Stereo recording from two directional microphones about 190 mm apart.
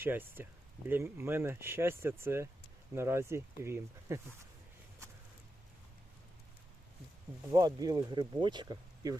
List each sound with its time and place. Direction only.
0.0 s speech: 10° right (ahead or behind)
7.5 s speech: 20° right (ahead or behind)